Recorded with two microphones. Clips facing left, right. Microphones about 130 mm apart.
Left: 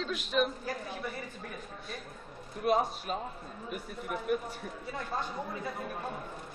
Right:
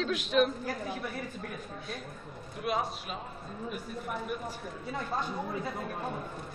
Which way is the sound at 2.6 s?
40° left (ahead or behind).